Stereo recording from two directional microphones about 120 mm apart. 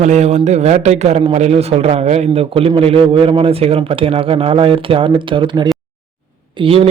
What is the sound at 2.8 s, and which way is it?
Speech, 50° right (ahead or behind).